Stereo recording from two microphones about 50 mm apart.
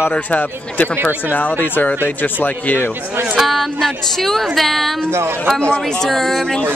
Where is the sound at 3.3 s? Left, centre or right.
Centre.